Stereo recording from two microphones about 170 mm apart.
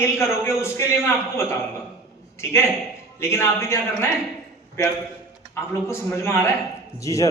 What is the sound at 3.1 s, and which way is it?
Speech, 15° left (ahead or behind).